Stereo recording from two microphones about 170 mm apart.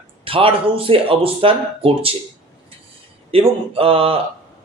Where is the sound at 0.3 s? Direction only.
35° right (ahead or behind).